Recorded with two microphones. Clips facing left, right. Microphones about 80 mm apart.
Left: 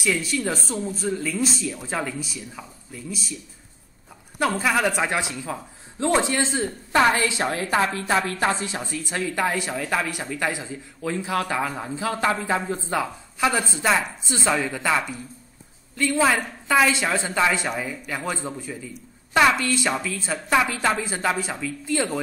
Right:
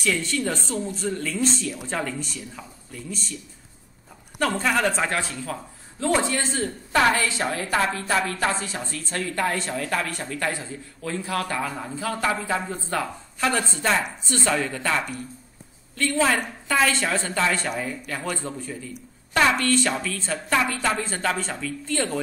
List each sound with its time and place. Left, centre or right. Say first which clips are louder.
0.0 s speech: left 1 dB; centre
4.4 s a man's voice: left 1 dB; centre
19.3 s speech: left 1 dB; centre